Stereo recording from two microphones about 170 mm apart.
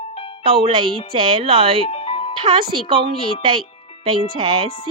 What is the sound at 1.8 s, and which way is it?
Music, 35° left (ahead or behind).